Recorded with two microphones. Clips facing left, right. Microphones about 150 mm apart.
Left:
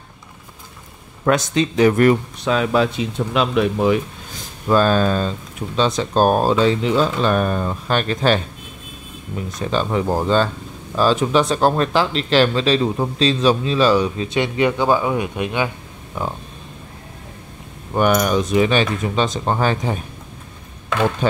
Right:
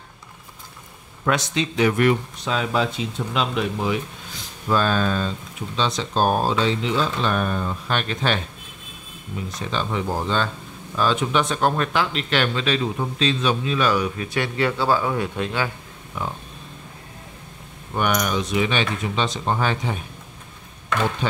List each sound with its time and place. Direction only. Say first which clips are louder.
1.2 s speech: left 5 dB; 45° left (ahead or behind)
2.4 s speech: left 6 dB; 60° left (ahead or behind)
4.6 s speech: left 5 dB; 40° left (ahead or behind)
9.6 s speech: left 6 dB; 40° left (ahead or behind); by 15.7 s 15° left (ahead or behind)
16.2 s speech: left 4 dB; 30° left (ahead or behind)
17.9 s speech: left 6 dB; 40° left (ahead or behind)
21.2 s speech: left 10 dB; 45° left (ahead or behind)